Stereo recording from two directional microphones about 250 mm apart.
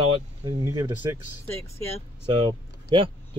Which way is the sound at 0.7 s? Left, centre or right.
Centre.